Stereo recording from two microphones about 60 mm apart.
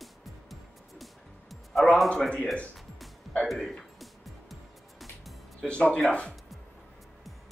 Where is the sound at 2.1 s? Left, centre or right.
Centre.